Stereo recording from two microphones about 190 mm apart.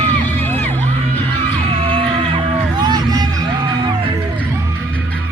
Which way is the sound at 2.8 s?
20° right (ahead or behind).